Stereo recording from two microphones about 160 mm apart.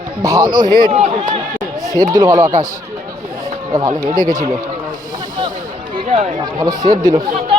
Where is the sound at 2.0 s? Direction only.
20° right (ahead or behind).